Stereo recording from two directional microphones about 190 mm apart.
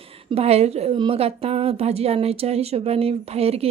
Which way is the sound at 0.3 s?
35° right (ahead or behind).